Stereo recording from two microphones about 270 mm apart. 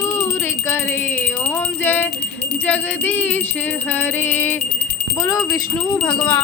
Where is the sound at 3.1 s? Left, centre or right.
Centre.